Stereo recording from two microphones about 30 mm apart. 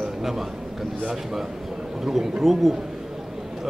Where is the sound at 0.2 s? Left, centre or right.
Centre.